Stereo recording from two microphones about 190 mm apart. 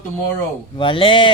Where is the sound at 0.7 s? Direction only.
25° left (ahead or behind).